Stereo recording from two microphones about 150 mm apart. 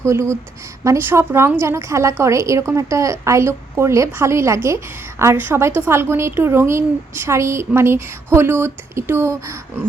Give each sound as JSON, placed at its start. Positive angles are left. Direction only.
{"t": 0.0, "sound": "a woman's voice", "side_deg": -20}